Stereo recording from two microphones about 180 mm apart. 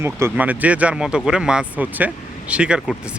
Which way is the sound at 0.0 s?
15° right (ahead or behind).